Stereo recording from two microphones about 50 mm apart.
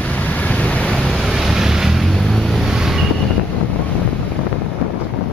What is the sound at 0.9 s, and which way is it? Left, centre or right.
Ocean, centre.